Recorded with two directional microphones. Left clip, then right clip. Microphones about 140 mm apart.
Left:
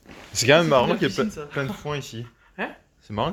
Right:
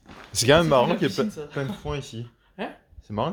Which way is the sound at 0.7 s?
25° right (ahead or behind).